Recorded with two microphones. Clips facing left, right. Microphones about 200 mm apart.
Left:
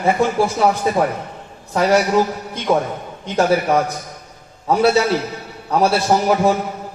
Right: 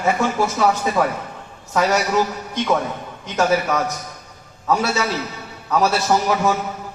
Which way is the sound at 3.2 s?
30° left (ahead or behind).